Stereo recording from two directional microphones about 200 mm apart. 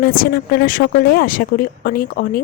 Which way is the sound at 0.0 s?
50° left (ahead or behind).